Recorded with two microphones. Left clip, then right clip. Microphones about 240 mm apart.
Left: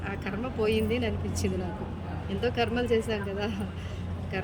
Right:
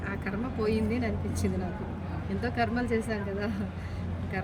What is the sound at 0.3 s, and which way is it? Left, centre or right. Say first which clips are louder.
Speech: left 3 dB; centre.